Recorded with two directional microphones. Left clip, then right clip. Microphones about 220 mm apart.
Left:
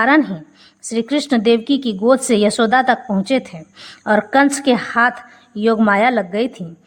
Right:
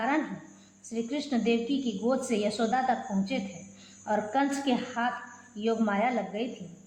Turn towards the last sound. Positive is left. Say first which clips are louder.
# left 14 dB
turn(degrees=45)  # may be behind; listen again after turning